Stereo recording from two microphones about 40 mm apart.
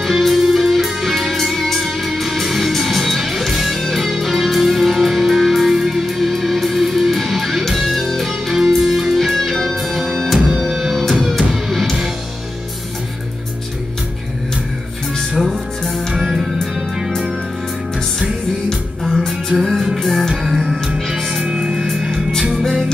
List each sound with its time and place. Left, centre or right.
0.0 s music: centre
15.3 s music: centre
18.7 s music: centre
21.5 s music: centre